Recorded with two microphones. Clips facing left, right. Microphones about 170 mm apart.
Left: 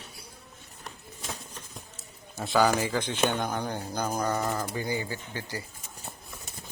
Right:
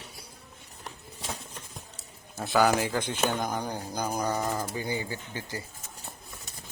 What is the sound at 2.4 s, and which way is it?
Speech, 5° right (ahead or behind).